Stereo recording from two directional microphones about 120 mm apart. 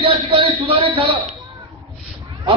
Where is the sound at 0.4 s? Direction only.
50° right (ahead or behind).